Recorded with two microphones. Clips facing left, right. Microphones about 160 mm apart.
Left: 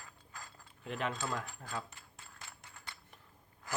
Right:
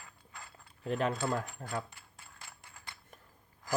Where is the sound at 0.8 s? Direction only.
40° right (ahead or behind).